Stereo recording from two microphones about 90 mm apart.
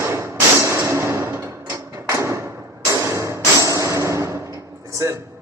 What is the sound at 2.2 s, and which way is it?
Thump, 35° right (ahead or behind).